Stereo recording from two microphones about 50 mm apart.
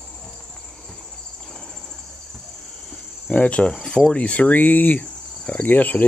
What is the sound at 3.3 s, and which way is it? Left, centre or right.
Cricket, left.